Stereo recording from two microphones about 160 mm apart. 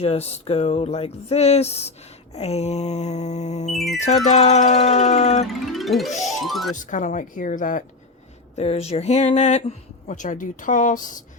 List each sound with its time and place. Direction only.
0.0 s speech: 40° left (ahead or behind)
3.8 s speech: centre (ahead or behind)
4.3 s speech: 45° left (ahead or behind)
5.7 s speech: centre (ahead or behind)
6.7 s speech: 50° left (ahead or behind)
8.5 s speech: 40° left (ahead or behind)